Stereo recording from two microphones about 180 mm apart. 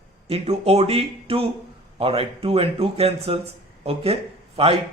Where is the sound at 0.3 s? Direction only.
35° right (ahead or behind).